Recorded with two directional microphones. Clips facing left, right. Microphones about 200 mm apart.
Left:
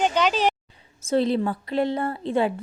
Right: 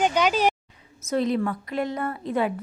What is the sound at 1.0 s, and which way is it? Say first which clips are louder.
A woman's voice: left 2 dB; 30° left (ahead or behind).